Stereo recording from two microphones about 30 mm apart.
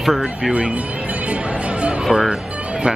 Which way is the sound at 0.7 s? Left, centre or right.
Right.